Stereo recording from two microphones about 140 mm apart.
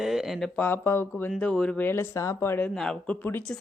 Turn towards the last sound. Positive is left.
turn(degrees=10)  # may be behind; listen again after turning